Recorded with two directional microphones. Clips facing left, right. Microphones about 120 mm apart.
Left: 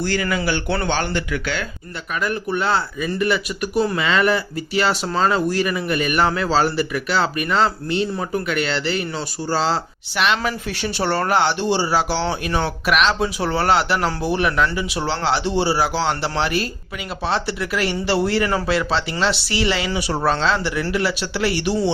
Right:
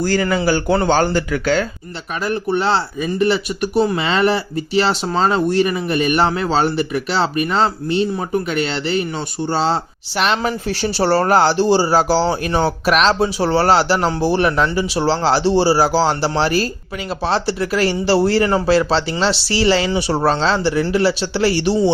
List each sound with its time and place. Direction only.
0.0 s speech: 40° right (ahead or behind)
2.2 s speech: 30° right (ahead or behind)
10.2 s speech: 35° right (ahead or behind)